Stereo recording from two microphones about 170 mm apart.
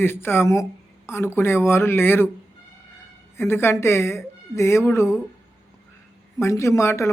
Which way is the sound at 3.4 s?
15° left (ahead or behind).